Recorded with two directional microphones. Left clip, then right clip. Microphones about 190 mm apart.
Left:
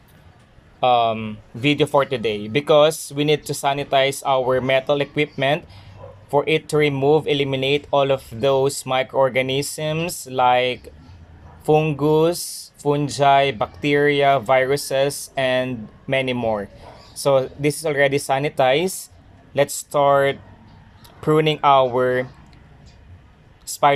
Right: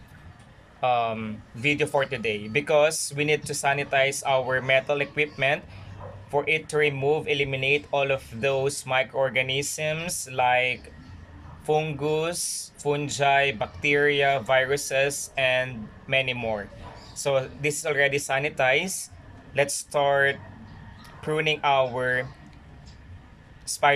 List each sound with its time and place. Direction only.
0.8 s speech: 20° left (ahead or behind)
23.6 s speech: 20° left (ahead or behind)